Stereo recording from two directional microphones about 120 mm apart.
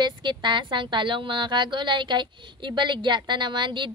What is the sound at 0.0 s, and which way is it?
A woman's voice, 40° right (ahead or behind).